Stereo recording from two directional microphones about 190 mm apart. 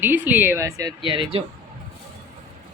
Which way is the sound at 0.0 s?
10° right (ahead or behind).